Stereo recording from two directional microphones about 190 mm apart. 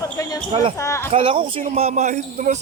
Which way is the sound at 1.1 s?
30° right (ahead or behind).